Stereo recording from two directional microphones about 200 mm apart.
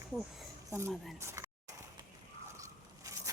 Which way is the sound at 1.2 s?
15° right (ahead or behind).